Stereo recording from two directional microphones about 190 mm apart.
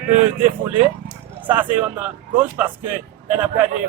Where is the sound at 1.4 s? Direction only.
10° right (ahead or behind).